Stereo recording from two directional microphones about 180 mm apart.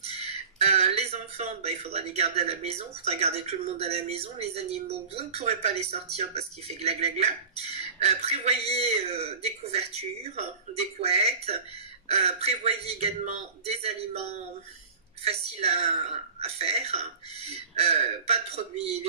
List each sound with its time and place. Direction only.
0.0 s speech: 35° right (ahead or behind)
15.2 s speech: 35° right (ahead or behind)